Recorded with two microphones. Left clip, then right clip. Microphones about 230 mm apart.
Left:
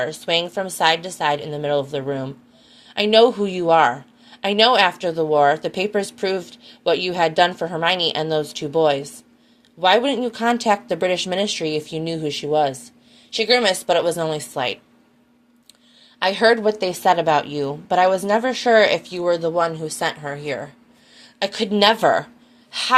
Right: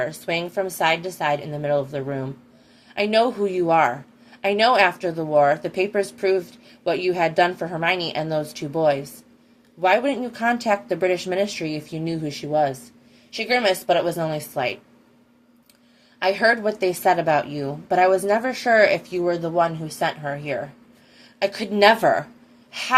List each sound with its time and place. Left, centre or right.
0.0 s a woman's voice: left
16.2 s a woman's voice: left